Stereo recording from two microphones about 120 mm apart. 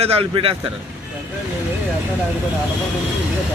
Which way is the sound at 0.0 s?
55° right (ahead or behind).